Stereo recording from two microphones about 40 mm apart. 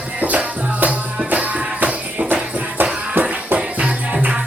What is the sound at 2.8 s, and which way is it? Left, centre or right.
Music, right.